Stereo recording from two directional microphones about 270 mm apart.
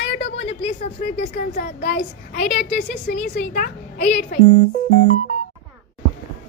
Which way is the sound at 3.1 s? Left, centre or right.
Left.